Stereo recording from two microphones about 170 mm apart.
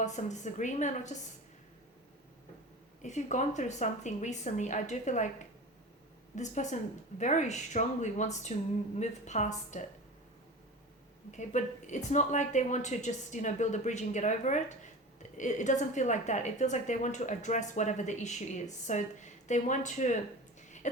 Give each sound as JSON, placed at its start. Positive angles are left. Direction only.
{"t": 0.0, "sound": "a woman's voice", "side_deg": 45}
{"t": 3.0, "sound": "a woman's voice", "side_deg": 45}
{"t": 6.3, "sound": "a woman's voice", "side_deg": 45}
{"t": 11.3, "sound": "a woman's voice", "side_deg": 45}
{"t": 20.6, "sound": "a sound", "side_deg": 45}